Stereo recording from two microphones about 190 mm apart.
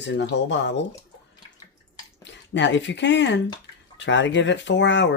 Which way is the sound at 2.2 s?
70° left (ahead or behind).